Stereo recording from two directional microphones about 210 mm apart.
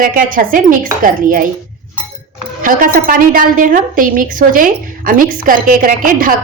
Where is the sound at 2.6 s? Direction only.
40° right (ahead or behind).